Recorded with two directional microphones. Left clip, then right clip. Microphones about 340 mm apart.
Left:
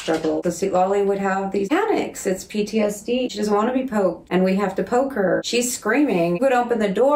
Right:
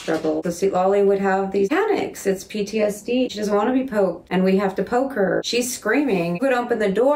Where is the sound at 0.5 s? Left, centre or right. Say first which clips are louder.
Right 1 dB; centre.